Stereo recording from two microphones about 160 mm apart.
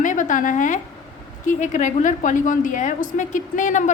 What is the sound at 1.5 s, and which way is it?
A woman's voice, 50° left (ahead or behind).